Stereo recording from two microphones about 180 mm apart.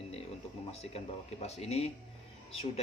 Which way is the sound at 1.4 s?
35° left (ahead or behind).